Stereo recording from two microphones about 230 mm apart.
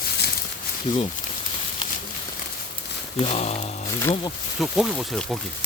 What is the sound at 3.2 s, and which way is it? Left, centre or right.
Speech, left.